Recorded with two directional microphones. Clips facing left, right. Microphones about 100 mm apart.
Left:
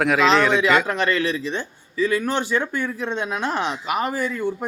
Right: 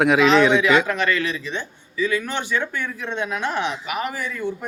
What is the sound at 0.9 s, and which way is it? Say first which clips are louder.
Speech: left 1 dB; 35° left (ahead or behind).